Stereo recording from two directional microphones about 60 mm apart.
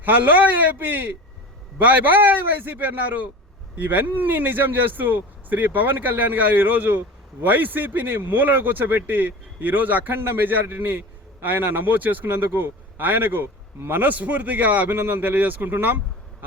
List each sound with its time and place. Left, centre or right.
0.0 s speech: right
14.1 s speech: right